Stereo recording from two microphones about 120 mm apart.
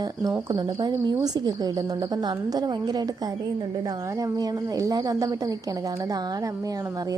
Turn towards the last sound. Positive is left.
turn(degrees=-30)  # may be behind; listen again after turning